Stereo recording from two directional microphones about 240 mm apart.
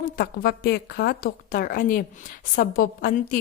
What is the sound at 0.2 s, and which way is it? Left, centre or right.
A woman's voice, left.